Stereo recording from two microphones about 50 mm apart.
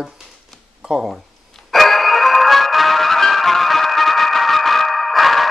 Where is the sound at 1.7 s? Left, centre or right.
Centre.